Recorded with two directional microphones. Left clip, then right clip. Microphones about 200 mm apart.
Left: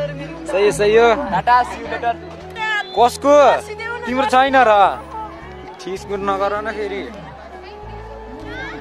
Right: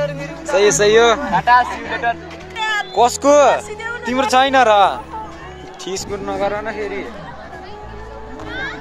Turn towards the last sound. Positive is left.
turn(degrees=5)  # may be behind; listen again after turning